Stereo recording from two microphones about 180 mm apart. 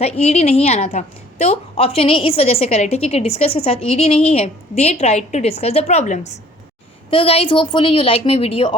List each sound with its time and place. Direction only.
0.0 s a woman's voice: 35° left (ahead or behind)